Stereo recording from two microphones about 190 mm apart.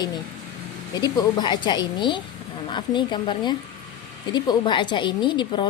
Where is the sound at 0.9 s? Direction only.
20° left (ahead or behind).